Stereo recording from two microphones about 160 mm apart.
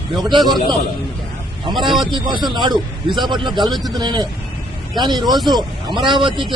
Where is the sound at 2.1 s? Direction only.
30° right (ahead or behind).